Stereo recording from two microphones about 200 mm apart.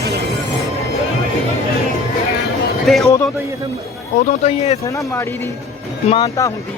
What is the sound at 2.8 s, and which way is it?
Speech, centre (ahead or behind).